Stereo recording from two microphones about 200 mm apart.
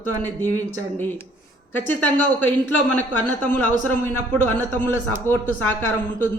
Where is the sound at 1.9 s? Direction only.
10° left (ahead or behind).